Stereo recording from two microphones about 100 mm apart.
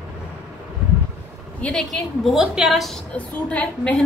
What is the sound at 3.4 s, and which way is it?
Speech, 15° left (ahead or behind).